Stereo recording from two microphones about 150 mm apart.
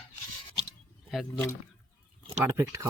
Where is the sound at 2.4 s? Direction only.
20° right (ahead or behind).